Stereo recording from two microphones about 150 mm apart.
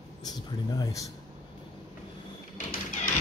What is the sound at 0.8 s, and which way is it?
Speech, 20° left (ahead or behind).